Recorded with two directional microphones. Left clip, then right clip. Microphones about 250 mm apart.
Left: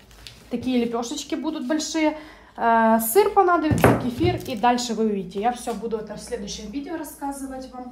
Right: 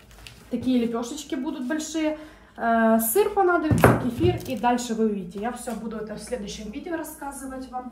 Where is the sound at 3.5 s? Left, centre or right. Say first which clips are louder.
Left 1 dB; centre.